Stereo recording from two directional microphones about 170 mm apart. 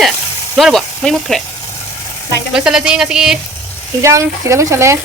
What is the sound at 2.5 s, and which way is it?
Speech, 5° right (ahead or behind).